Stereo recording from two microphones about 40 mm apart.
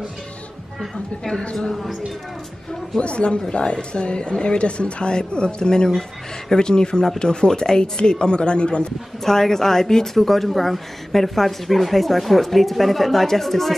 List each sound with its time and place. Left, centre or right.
1.4 s a woman's voice: left
1.7 s speech: centre
3.0 s a woman's voice: left
9.2 s a woman's voice: centre